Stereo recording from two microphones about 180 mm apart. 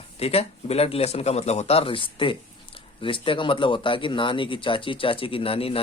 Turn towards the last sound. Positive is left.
turn(degrees=30)  # may be behind; listen again after turning